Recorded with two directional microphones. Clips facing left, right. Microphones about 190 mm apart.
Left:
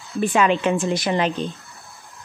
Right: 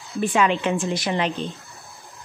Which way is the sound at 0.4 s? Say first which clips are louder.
Left 2 dB; 50° left (ahead or behind).